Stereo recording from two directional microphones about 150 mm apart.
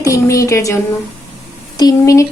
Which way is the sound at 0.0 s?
20° left (ahead or behind).